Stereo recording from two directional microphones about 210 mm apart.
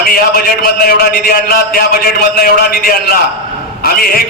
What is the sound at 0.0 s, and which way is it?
A man's voice, 45° left (ahead or behind).